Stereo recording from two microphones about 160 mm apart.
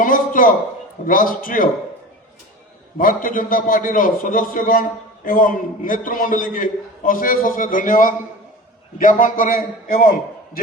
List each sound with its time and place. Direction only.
0.0 s a sound: 60° left (ahead or behind)
1.0 s a man's voice: 60° left (ahead or behind)
3.0 s a man's voice: 60° left (ahead or behind)